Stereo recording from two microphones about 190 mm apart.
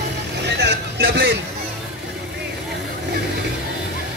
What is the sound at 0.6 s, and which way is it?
Vehicle, 65° right (ahead or behind).